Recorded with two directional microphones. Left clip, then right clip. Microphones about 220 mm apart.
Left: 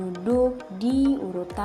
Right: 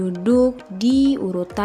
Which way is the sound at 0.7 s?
70° right (ahead or behind).